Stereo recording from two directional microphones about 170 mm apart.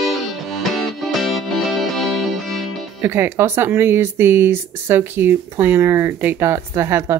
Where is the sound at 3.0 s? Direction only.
15° right (ahead or behind).